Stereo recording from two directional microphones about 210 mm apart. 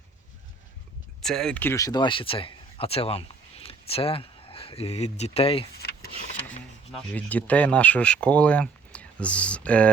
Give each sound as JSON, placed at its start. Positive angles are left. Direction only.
{"t": 1.2, "sound": "speech", "side_deg": 0}
{"t": 5.7, "sound": "rub", "side_deg": 50}
{"t": 7.1, "sound": "speech", "side_deg": 5}